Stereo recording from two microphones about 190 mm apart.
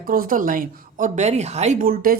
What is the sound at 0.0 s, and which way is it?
A woman's voice, 50° right (ahead or behind).